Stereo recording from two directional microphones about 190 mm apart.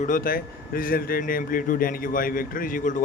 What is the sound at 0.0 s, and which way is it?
A man's voice, 45° left (ahead or behind).